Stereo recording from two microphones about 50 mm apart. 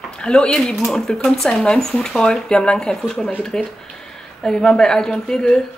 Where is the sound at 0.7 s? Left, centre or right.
Centre.